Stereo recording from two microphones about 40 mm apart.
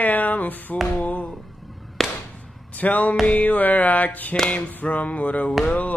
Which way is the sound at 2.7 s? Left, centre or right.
Left.